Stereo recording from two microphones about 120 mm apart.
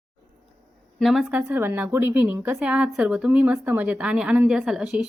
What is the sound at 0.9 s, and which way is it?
Speech, centre (ahead or behind).